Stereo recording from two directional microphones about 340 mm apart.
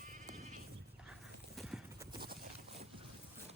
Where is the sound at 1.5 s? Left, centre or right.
Centre.